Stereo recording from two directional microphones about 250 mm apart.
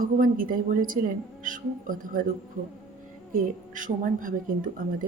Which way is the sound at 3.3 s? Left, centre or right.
Right.